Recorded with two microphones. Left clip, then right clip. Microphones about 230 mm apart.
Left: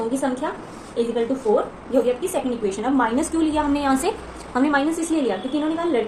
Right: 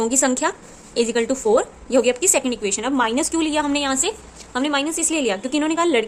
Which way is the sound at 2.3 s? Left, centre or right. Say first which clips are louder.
Right 2 dB; right.